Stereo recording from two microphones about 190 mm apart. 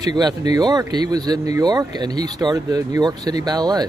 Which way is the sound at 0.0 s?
20° right (ahead or behind).